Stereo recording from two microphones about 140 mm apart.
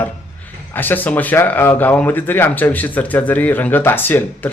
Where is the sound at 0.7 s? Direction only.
15° left (ahead or behind).